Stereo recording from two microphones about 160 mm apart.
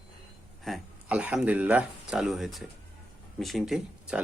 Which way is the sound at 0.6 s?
5° right (ahead or behind).